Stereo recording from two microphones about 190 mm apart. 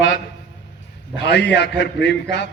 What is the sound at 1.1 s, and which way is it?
A man's voice, 60° left (ahead or behind).